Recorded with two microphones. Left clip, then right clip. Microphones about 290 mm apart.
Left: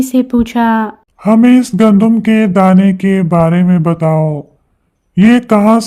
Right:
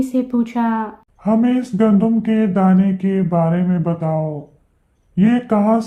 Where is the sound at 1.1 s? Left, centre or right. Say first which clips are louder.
Left 9 dB; left.